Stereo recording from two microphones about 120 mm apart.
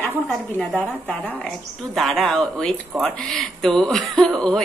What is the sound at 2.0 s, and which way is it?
Speech, centre (ahead or behind).